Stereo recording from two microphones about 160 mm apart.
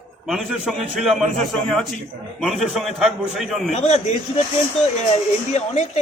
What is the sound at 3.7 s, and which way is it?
Speech, 45° left (ahead or behind).